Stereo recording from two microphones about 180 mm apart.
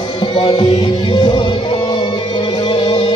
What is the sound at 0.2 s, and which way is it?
Music, 25° left (ahead or behind).